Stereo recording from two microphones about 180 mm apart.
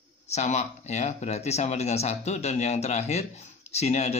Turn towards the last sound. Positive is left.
turn(degrees=35)  # may be behind; listen again after turning